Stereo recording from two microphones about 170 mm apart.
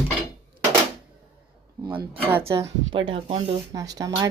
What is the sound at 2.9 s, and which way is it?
Speech, 30° right (ahead or behind).